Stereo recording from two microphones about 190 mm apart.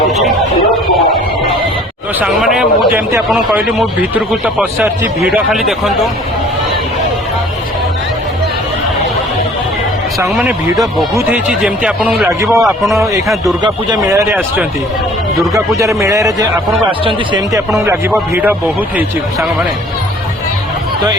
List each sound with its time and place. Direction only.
2.1 s speech: 5° right (ahead or behind)
10.2 s speech: centre (ahead or behind)
13.6 s speech: 20° right (ahead or behind)
17.0 s speech: 30° right (ahead or behind)
17.8 s speech: 10° right (ahead or behind)